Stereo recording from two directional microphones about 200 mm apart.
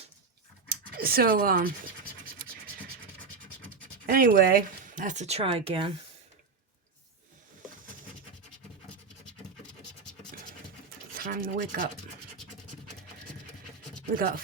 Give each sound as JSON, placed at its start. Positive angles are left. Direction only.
{"t": 0.7, "sound": "speech", "side_deg": -50}
{"t": 4.0, "sound": "speech", "side_deg": -45}
{"t": 11.2, "sound": "speech", "side_deg": -45}